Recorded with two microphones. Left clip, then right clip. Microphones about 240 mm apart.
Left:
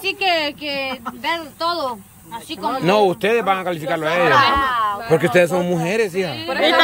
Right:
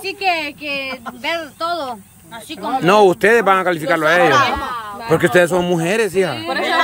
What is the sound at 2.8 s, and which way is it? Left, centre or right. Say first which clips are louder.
A man's voice: right 5 dB; centre.